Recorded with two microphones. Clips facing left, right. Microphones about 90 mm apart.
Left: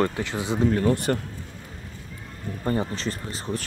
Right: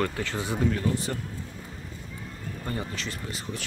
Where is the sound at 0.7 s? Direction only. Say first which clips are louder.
Left 6 dB; 55° left (ahead or behind).